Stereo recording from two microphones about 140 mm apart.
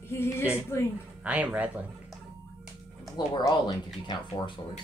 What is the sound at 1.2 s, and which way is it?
Speech, 10° right (ahead or behind).